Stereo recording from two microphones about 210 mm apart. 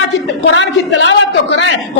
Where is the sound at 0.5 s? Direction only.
60° left (ahead or behind).